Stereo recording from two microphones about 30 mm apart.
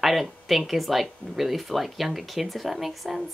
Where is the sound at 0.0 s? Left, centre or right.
Centre.